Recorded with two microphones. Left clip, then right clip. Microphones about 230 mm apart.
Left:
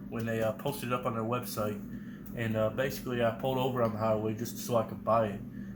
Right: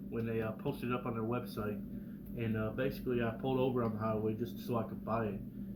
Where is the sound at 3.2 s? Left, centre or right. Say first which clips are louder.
Left 7 dB; left.